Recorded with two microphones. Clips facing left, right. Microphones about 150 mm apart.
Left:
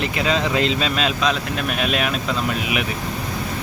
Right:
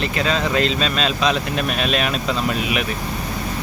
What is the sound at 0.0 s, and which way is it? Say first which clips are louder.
Speech: even; 15° left (ahead or behind).